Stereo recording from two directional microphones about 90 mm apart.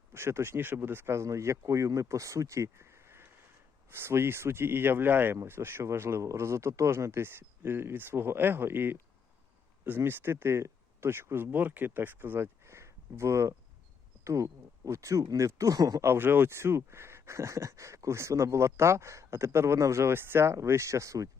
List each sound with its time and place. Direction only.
0.1 s speech: 30° right (ahead or behind)
16.0 s speech: 25° right (ahead or behind)